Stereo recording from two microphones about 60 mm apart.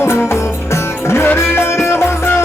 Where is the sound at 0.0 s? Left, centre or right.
Left.